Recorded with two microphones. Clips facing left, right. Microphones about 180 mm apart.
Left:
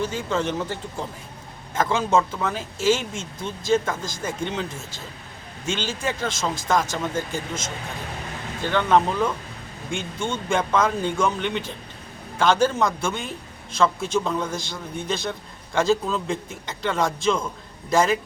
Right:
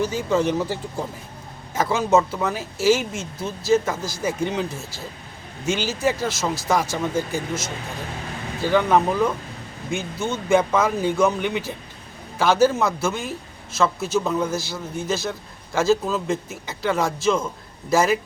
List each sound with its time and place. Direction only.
0.0 s a man's voice: 10° right (ahead or behind)